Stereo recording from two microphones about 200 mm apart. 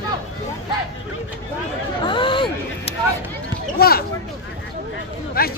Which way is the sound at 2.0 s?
25° left (ahead or behind).